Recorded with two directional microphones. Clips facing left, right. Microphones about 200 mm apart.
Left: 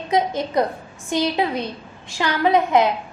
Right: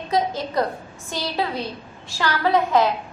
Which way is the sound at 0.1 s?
20° left (ahead or behind).